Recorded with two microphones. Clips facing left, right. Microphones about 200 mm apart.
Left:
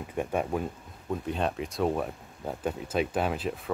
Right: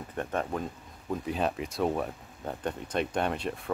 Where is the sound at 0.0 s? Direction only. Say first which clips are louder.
Left 3 dB; 10° left (ahead or behind).